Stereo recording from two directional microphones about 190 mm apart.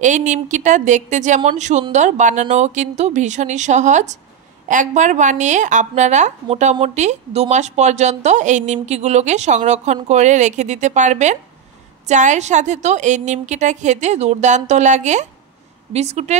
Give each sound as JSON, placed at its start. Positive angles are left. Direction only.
{"t": 0.0, "sound": "a woman's voice", "side_deg": -40}